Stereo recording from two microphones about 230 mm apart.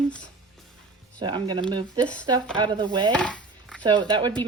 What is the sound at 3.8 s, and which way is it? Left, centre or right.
Speech, centre.